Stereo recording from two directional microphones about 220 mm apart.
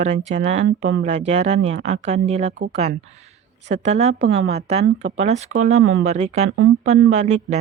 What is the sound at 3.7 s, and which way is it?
Speech, 30° right (ahead or behind).